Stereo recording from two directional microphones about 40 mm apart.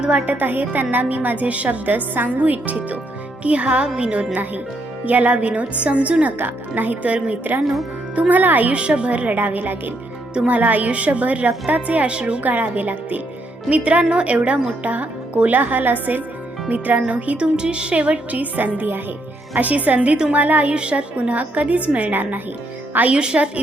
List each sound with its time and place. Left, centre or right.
0.1 s a woman's voice: right
0.3 s speech: right
1.9 s a woman's voice: right
5.0 s a woman's voice: right
6.4 s speech: right
8.3 s speech: right
8.7 s a woman's voice: right
12.4 s speech: right
13.7 s a woman's voice: right
17.3 s a woman's voice: right
23.1 s a woman's voice: right